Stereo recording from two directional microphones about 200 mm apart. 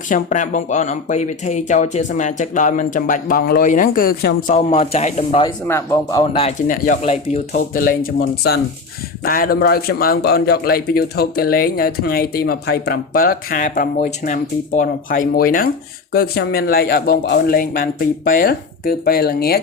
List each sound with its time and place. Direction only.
0.1 s speech: 40° left (ahead or behind)
4.5 s speech: 30° left (ahead or behind); by 6.4 s 15° left (ahead or behind)
6.7 s speech: 40° left (ahead or behind)
7.7 s a man's voice: 45° left (ahead or behind)